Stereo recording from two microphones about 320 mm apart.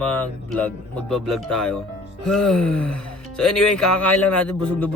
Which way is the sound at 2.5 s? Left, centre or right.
Left.